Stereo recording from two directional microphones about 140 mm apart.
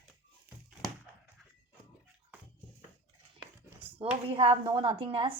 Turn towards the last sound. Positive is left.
turn(degrees=-40)  # may be behind; listen again after turning